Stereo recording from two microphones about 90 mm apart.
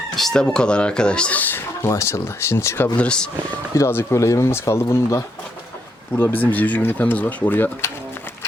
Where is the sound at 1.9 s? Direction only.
30° left (ahead or behind).